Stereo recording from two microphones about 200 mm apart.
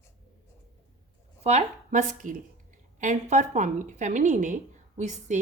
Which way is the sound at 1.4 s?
35° right (ahead or behind).